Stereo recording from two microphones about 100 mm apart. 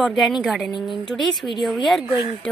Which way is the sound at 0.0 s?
Centre (ahead or behind).